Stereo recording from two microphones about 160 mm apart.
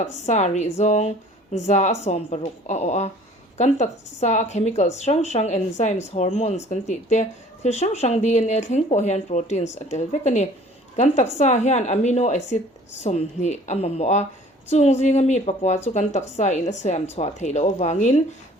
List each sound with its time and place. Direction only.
0.3 s a woman's voice: 45° left (ahead or behind)